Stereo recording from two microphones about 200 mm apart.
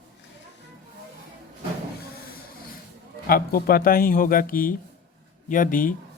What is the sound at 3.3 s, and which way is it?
Speech, 45° left (ahead or behind).